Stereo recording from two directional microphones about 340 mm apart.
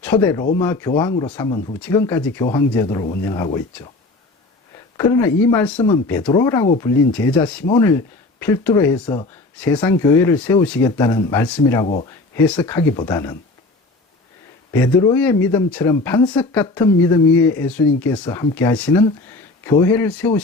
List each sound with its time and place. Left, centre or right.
0.0 s speech: centre
4.9 s speech: centre
14.7 s speech: centre